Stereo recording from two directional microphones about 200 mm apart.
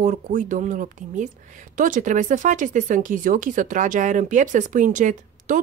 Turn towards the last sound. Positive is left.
turn(degrees=-40)  # may be behind; listen again after turning